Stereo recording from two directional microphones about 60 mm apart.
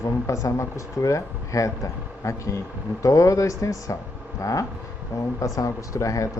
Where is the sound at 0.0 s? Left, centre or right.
Left.